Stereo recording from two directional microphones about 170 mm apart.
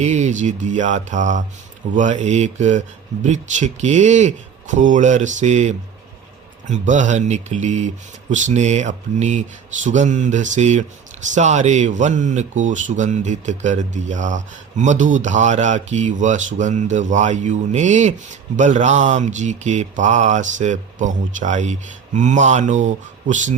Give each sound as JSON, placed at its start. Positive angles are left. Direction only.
{"t": 0.0, "sound": "speech", "side_deg": -40}